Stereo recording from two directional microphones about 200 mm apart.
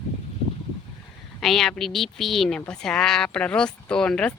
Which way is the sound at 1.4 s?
Centre (ahead or behind).